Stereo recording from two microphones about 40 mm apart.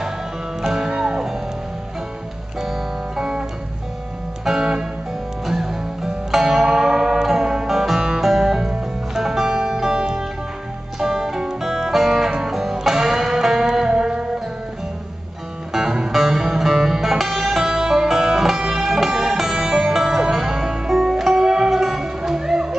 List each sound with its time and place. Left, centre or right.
0.6 s music: centre
2.6 s music: centre
4.5 s music: centre
15.7 s music: centre